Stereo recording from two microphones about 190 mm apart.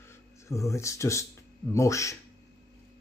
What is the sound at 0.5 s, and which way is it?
Speech, 15° left (ahead or behind).